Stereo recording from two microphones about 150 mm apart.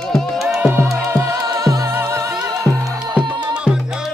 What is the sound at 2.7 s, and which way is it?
Music, centre (ahead or behind).